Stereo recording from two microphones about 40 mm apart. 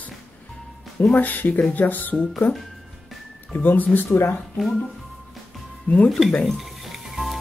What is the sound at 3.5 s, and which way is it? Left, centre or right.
Speech, left.